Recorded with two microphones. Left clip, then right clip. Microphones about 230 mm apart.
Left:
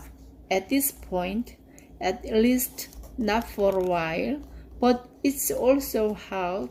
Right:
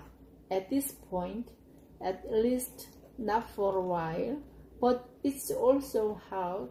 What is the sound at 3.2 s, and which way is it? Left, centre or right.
Speech, left.